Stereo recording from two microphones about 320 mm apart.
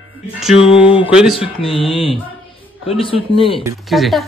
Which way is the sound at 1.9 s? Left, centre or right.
Centre.